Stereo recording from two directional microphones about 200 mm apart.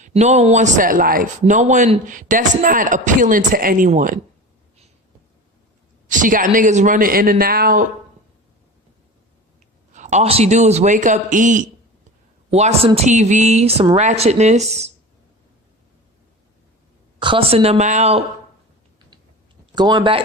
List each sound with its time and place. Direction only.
0.0 s a man's voice: 35° right (ahead or behind)
6.1 s a man's voice: 40° right (ahead or behind)
9.9 s a man's voice: 35° right (ahead or behind)
17.2 s a man's voice: 25° right (ahead or behind)
19.7 s speech: 20° right (ahead or behind)